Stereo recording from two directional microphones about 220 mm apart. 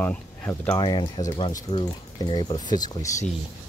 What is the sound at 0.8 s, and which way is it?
Speech, 20° left (ahead or behind).